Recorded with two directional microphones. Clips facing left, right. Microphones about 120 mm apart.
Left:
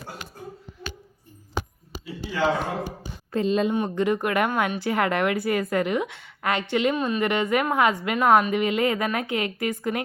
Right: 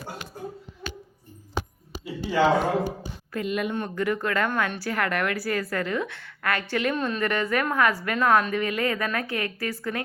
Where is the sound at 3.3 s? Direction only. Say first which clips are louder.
Left 5 dB; 30° left (ahead or behind).